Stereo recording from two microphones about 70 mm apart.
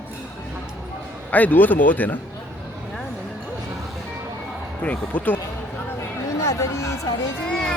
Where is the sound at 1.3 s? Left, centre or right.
Left.